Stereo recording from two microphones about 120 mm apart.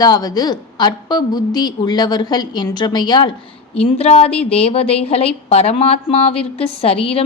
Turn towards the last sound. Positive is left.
turn(degrees=55)  # may be behind; listen again after turning